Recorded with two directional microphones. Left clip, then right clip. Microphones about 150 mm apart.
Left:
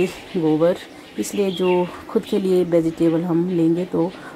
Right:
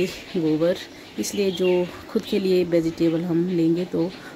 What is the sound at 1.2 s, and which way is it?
Speech, centre (ahead or behind).